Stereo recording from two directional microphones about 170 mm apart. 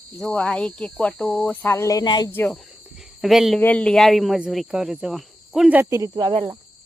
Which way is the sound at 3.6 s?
10° left (ahead or behind).